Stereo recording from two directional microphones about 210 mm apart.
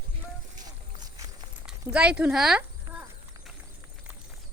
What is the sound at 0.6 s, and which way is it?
Walk, 20° right (ahead or behind).